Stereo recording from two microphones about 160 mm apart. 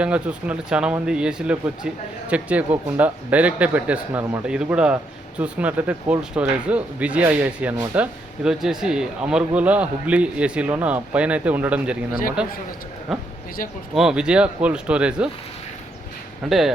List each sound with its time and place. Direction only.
0.0 s speech: 5° right (ahead or behind)
13.6 s speech: 60° left (ahead or behind)
13.9 s speech: 5° right (ahead or behind)
16.5 s speech: centre (ahead or behind)